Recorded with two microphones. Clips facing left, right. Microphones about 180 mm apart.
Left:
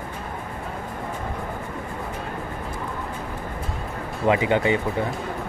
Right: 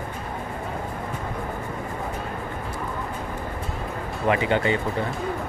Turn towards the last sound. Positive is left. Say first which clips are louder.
# left 2 dB
turn(degrees=15)  # may be behind; listen again after turning